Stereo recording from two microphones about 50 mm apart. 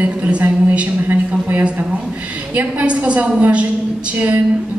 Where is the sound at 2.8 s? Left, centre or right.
Right.